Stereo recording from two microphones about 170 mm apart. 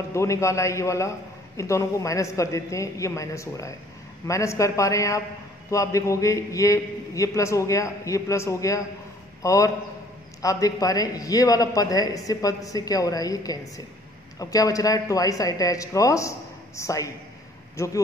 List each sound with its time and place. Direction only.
0.1 s a man's voice: 15° left (ahead or behind)